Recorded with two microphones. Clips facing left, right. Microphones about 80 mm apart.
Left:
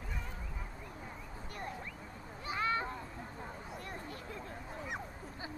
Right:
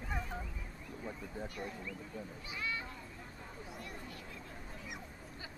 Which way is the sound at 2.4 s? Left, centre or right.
Left.